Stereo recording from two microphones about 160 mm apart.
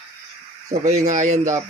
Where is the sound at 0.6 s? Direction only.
45° right (ahead or behind).